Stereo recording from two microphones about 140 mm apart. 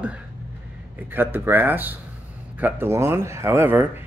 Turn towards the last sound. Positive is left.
turn(degrees=-15)  # may be behind; listen again after turning